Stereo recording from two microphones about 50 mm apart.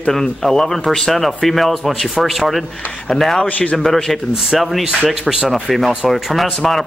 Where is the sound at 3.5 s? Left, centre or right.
Left.